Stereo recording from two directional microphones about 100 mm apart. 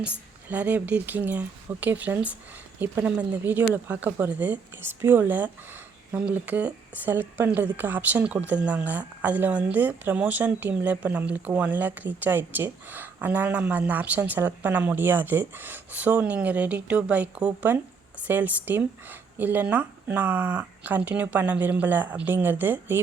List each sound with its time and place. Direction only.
0.4 s a woman's voice: 15° right (ahead or behind)